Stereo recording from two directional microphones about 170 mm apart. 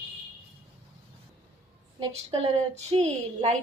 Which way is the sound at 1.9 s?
35° right (ahead or behind).